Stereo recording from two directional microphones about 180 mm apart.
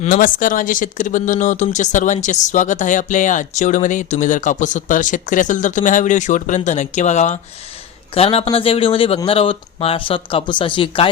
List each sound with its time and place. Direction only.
0.0 s speech: 50° left (ahead or behind); by 11.1 s 30° left (ahead or behind)